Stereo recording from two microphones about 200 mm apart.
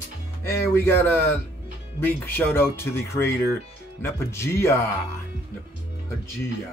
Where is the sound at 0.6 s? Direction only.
10° left (ahead or behind).